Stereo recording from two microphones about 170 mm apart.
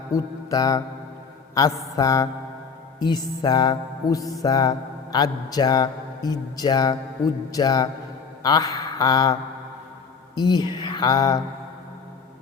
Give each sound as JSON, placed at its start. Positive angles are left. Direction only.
{"t": 0.1, "sound": "mantra", "side_deg": 20}
{"t": 1.6, "sound": "a man's voice", "side_deg": 20}
{"t": 10.8, "sound": "a sound", "side_deg": 25}